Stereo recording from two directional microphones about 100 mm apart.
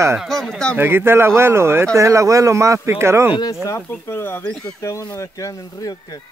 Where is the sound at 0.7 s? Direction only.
25° right (ahead or behind).